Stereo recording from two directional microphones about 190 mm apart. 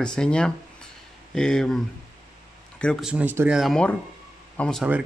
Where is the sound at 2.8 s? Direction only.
Centre (ahead or behind).